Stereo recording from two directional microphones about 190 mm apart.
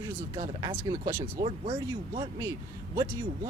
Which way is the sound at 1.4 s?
30° right (ahead or behind).